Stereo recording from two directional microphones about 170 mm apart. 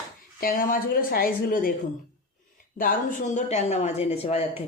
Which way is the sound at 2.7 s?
55° left (ahead or behind).